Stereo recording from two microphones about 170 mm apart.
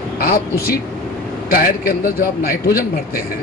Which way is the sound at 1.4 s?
55° left (ahead or behind).